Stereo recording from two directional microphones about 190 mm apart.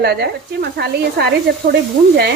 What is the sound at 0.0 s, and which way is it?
Speech, 60° right (ahead or behind).